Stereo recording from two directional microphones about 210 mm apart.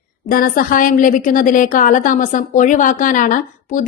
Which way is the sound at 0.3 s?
40° left (ahead or behind).